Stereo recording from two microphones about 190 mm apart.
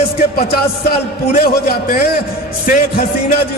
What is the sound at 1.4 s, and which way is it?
A man's voice, 50° left (ahead or behind).